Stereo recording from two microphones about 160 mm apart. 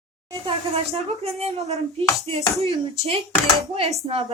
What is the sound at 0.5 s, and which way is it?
A child's voice, 40° right (ahead or behind).